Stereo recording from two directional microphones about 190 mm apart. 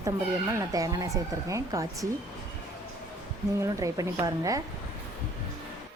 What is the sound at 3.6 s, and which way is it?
Speech, 15° right (ahead or behind).